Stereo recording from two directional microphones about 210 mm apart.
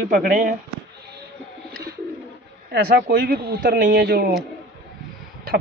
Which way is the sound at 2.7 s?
45° right (ahead or behind).